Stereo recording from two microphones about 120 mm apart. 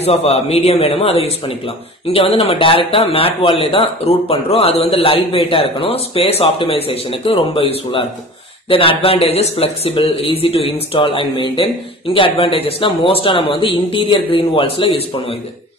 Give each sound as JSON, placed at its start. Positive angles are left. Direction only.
{"t": 0.0, "sound": "a man's voice", "side_deg": 60}